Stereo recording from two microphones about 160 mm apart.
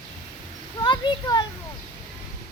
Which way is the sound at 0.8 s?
30° left (ahead or behind).